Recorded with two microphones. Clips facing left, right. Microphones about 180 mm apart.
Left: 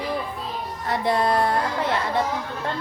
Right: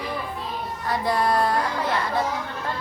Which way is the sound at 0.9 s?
25° left (ahead or behind).